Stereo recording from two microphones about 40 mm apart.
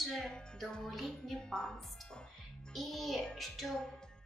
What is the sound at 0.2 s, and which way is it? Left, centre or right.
Music, centre.